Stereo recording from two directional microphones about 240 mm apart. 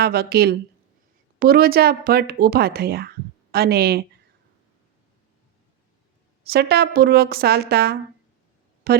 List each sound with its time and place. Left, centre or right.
0.0 s speech: right
6.4 s speech: right